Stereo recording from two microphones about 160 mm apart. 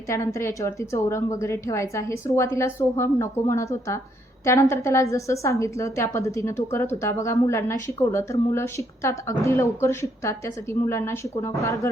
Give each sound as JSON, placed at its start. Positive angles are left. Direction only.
{"t": 0.1, "sound": "a woman's voice", "side_deg": 15}